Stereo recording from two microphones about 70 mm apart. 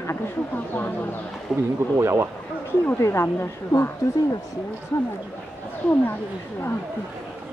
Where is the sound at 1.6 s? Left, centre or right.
Right.